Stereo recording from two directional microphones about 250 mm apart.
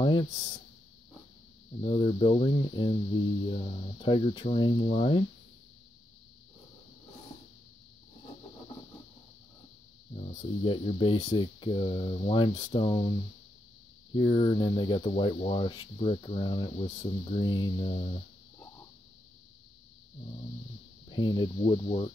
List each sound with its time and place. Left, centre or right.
0.0 s a sound: centre
1.8 s speech: left
10.1 s speech: left
14.1 s speech: left
21.1 s speech: centre